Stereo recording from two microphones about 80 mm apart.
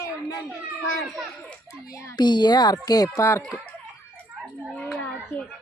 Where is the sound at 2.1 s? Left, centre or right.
Left.